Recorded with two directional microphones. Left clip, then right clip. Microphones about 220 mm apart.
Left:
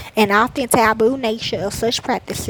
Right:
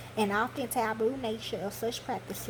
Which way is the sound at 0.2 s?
45° left (ahead or behind).